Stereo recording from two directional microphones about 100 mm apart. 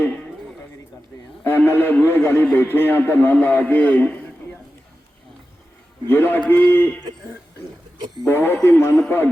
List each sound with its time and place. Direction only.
1.5 s a man's voice: 20° left (ahead or behind)
6.1 s a man's voice: 20° left (ahead or behind)
8.3 s a man's voice: 20° left (ahead or behind)